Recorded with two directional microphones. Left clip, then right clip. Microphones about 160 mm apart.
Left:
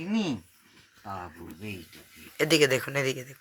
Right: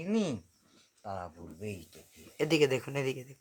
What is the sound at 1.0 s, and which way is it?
Speech, 30° right (ahead or behind).